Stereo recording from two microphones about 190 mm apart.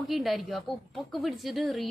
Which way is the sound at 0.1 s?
Centre (ahead or behind).